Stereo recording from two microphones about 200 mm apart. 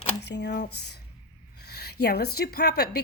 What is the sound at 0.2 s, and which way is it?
A woman's voice, 60° left (ahead or behind).